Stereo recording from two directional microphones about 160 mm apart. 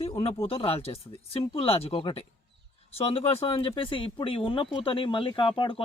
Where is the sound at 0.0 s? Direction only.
35° left (ahead or behind).